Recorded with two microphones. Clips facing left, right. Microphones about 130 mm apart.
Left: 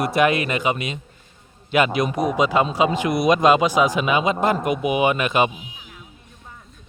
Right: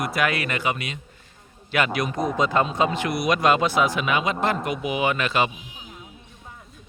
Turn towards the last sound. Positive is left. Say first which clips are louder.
# left 4 dB
turn(degrees=20)  # may be behind; listen again after turning